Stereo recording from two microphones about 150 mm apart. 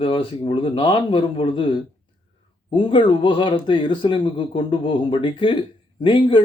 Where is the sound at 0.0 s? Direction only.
35° left (ahead or behind).